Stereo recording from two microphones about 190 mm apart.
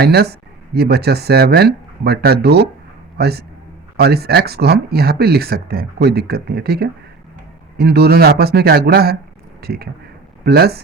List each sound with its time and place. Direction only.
0.0 s a man's voice: 55° right (ahead or behind)